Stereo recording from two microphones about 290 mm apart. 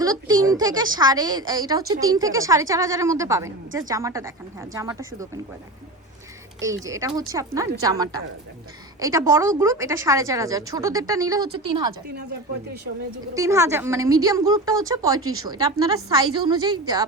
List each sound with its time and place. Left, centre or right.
0.0 s a woman's voice: centre
6.6 s a woman's voice: centre
13.3 s a woman's voice: centre
15.2 s a woman's voice: right
15.4 s a woman's voice: centre